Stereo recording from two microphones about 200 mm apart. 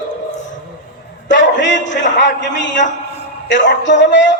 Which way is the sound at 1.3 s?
65° left (ahead or behind).